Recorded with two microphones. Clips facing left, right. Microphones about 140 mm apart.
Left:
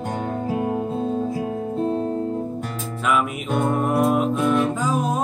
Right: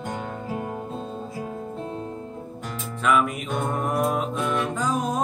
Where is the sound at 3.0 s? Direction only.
5° left (ahead or behind).